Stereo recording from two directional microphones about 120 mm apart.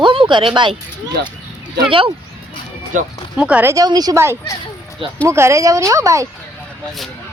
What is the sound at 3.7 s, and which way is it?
Speech, 30° right (ahead or behind).